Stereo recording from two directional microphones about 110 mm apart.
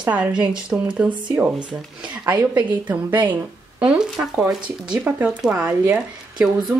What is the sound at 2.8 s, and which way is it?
Speech, 15° right (ahead or behind).